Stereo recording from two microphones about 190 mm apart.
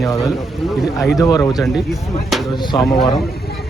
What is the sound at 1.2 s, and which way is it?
Speech, 20° left (ahead or behind).